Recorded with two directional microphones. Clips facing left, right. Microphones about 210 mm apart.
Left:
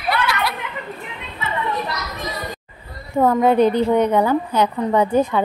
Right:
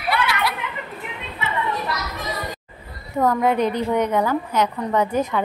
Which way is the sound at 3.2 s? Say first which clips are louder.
Left 4 dB; 30° left (ahead or behind).